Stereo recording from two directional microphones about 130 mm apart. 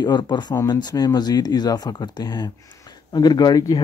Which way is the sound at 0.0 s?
35° left (ahead or behind).